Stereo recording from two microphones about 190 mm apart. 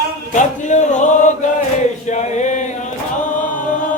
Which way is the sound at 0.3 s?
40° left (ahead or behind).